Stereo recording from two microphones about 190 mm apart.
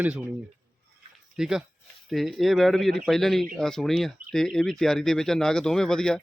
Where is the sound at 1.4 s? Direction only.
5° right (ahead or behind).